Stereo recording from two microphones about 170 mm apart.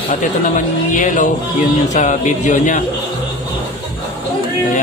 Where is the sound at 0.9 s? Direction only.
50° left (ahead or behind).